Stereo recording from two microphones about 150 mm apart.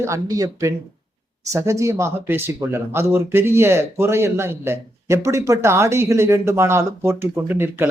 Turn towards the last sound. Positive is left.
turn(degrees=-15)  # may be behind; listen again after turning